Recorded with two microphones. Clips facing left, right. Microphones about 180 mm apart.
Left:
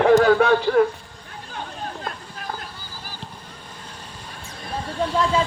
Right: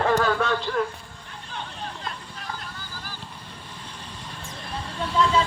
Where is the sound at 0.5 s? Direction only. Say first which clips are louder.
Left 8 dB; 50° left (ahead or behind).